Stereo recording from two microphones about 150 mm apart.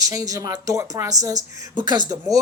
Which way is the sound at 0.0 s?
25° right (ahead or behind).